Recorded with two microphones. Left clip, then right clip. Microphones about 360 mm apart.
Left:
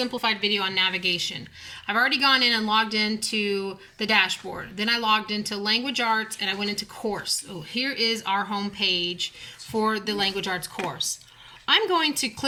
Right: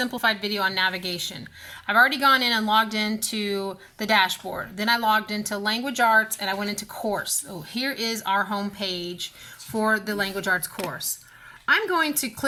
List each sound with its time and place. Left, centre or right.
0.0 s speech: centre
11.6 s speech: centre